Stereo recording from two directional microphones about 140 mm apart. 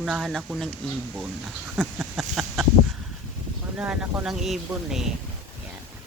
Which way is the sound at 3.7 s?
5° right (ahead or behind).